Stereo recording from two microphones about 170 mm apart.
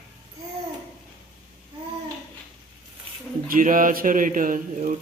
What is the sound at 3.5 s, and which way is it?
Speech, 55° right (ahead or behind).